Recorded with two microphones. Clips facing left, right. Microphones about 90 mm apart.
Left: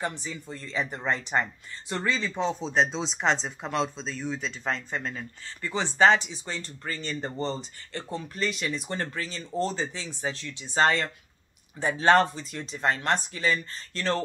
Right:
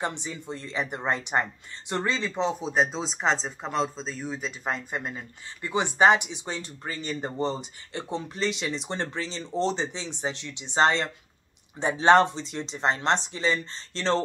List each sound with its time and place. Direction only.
0.0 s speech: 25° right (ahead or behind)